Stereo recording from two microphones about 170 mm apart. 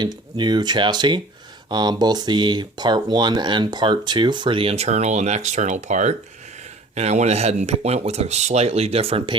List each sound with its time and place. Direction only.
0.0 s speech: 25° right (ahead or behind)